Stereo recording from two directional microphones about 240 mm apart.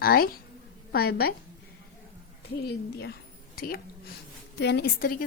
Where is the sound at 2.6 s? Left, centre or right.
Left.